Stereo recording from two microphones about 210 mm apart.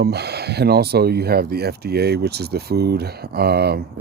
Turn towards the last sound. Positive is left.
turn(degrees=-50)  # may be behind; listen again after turning